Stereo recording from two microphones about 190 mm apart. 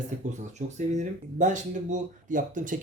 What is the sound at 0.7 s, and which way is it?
Speech, 40° right (ahead or behind).